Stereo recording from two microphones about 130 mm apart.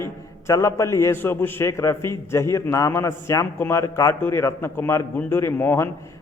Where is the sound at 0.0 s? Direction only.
25° left (ahead or behind).